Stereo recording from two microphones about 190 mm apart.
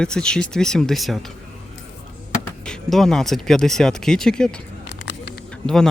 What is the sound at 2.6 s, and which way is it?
Speech, centre (ahead or behind).